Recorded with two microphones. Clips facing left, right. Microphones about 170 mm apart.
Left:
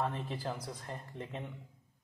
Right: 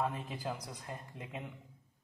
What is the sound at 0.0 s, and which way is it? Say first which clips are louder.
Speech: left 1 dB; 10° right (ahead or behind).